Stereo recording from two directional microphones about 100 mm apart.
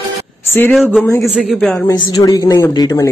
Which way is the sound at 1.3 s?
Centre (ahead or behind).